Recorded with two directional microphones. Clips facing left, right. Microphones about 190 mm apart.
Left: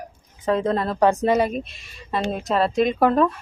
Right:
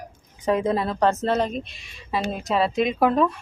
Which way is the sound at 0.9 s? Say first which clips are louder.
Left 6 dB; 15° left (ahead or behind).